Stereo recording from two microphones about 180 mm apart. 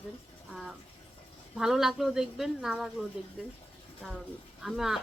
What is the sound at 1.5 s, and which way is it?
Speech, centre (ahead or behind).